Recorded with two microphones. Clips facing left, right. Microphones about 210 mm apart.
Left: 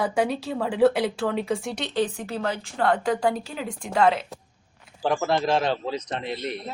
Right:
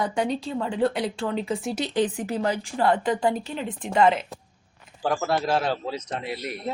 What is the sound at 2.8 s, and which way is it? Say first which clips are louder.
A man's voice: even; centre (ahead or behind).